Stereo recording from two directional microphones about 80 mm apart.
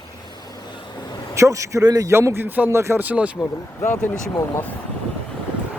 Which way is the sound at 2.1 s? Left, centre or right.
Right.